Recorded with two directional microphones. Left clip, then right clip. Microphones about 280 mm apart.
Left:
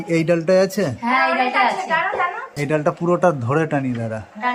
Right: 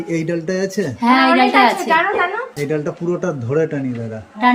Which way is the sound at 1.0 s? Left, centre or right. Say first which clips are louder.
Right 6 dB; right.